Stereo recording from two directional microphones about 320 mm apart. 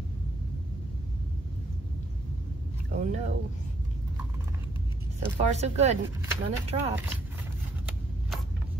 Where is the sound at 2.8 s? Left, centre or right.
Right.